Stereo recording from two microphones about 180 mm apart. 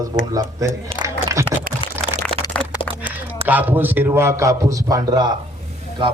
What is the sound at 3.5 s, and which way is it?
A man's voice, 10° right (ahead or behind).